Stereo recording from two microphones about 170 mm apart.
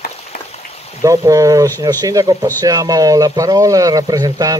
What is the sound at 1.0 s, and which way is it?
Speech, 20° right (ahead or behind).